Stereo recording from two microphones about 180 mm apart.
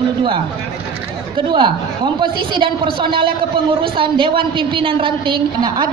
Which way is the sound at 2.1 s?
25° right (ahead or behind).